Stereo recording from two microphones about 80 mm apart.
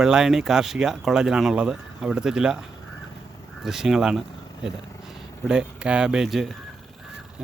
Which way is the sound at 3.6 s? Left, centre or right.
Centre.